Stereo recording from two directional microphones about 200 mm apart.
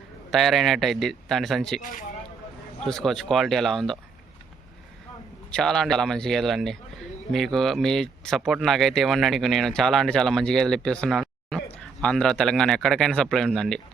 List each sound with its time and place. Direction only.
0.3 s speech: centre (ahead or behind)
1.8 s speech: 40° left (ahead or behind)
2.8 s speech: centre (ahead or behind)
5.5 s speech: 5° left (ahead or behind)